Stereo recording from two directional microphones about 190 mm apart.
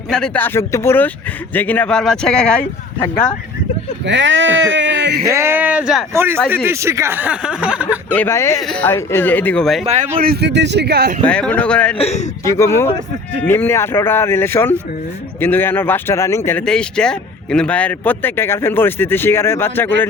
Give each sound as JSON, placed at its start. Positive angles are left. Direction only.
{"t": 0.1, "sound": "speech", "side_deg": 5}
{"t": 4.0, "sound": "speech", "side_deg": -70}
{"t": 5.2, "sound": "speech", "side_deg": -15}
{"t": 8.1, "sound": "speech", "side_deg": 10}
{"t": 9.8, "sound": "speech", "side_deg": -35}
{"t": 10.2, "sound": "a man's voice", "side_deg": -55}
{"t": 11.3, "sound": "speech", "side_deg": 5}
{"t": 11.9, "sound": "a man's voice", "side_deg": 35}
{"t": 12.5, "sound": "speech", "side_deg": 15}